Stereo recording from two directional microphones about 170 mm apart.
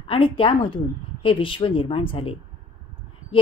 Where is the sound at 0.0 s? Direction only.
30° left (ahead or behind).